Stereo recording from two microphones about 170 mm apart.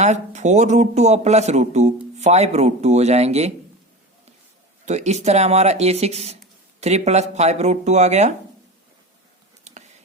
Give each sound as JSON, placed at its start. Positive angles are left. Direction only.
{"t": 0.0, "sound": "speech", "side_deg": -45}
{"t": 4.9, "sound": "speech", "side_deg": -40}
{"t": 9.7, "sound": "a sound", "side_deg": -40}